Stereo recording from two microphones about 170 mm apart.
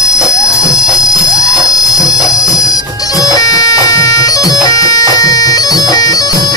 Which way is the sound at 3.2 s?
20° left (ahead or behind).